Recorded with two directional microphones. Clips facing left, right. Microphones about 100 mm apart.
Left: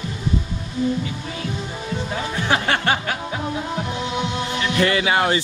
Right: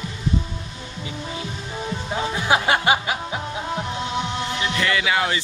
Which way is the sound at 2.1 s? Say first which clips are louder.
Right 2 dB; 15° right (ahead or behind).